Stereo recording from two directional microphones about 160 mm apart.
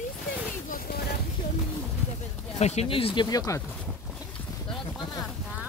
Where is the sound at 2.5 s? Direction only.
45° left (ahead or behind); by 3.6 s 20° left (ahead or behind).